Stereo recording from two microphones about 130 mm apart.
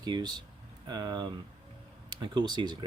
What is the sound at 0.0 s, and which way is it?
Speech, 35° right (ahead or behind).